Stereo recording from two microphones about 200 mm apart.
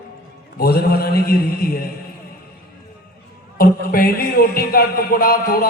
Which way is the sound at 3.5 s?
50° left (ahead or behind).